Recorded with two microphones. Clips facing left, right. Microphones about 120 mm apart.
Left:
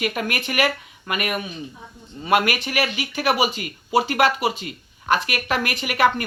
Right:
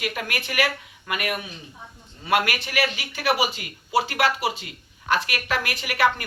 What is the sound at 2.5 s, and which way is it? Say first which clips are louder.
Speech: left 2 dB; 15° left (ahead or behind).